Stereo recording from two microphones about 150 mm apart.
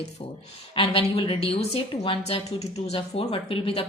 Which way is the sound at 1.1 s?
40° left (ahead or behind).